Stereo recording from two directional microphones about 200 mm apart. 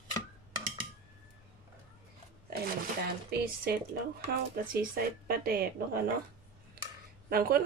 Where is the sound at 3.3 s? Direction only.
55° right (ahead or behind).